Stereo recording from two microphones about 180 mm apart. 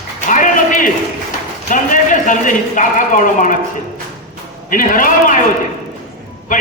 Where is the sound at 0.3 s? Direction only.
45° left (ahead or behind).